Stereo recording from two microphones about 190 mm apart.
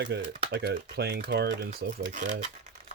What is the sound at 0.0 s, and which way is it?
Speech, 65° right (ahead or behind).